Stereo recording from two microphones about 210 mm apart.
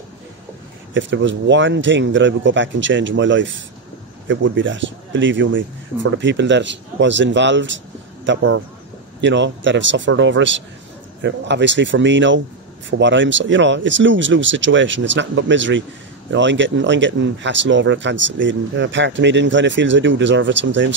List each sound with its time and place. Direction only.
0.9 s speech: 60° right (ahead or behind)